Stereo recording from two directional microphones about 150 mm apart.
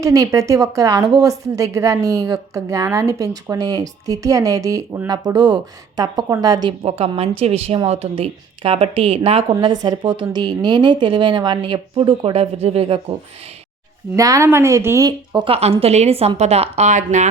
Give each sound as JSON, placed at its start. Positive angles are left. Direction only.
{"t": 0.0, "sound": "a woman's voice", "side_deg": -20}
{"t": 7.0, "sound": "a woman's voice", "side_deg": -40}
{"t": 14.2, "sound": "a woman's voice", "side_deg": -20}
{"t": 15.4, "sound": "a woman's voice", "side_deg": -40}